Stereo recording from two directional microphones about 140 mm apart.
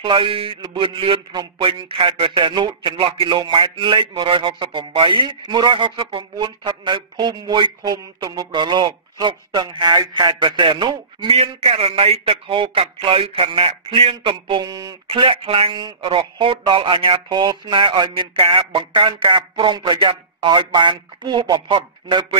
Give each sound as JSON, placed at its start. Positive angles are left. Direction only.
{"t": 0.0, "sound": "a man's voice", "side_deg": -40}
{"t": 15.0, "sound": "a man's voice", "side_deg": -40}